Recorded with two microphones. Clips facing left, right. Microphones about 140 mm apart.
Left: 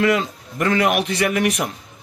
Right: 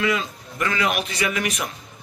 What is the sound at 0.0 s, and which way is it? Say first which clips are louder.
A man's voice: left 5 dB; 70° left (ahead or behind).